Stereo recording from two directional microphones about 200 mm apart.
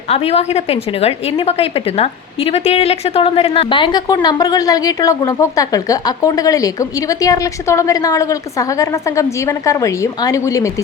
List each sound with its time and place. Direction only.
0.1 s a woman's voice: 30° left (ahead or behind)